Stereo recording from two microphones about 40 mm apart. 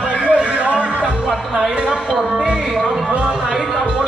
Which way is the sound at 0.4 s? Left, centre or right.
Right.